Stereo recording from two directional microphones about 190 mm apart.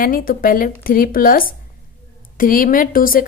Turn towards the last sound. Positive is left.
turn(degrees=50)  # may be behind; listen again after turning